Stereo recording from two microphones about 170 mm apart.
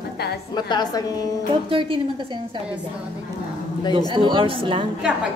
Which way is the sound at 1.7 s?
30° right (ahead or behind).